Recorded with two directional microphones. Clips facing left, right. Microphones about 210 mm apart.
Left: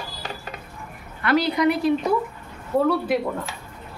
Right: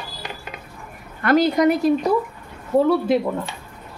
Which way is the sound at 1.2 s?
45° right (ahead or behind).